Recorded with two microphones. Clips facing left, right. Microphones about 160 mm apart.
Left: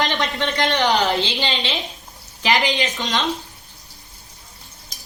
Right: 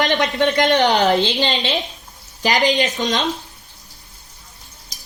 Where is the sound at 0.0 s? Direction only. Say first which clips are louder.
Right 5 dB; 50° right (ahead or behind).